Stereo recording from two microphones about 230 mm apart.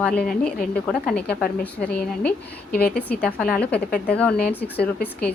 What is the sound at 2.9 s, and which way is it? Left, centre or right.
Speech, centre.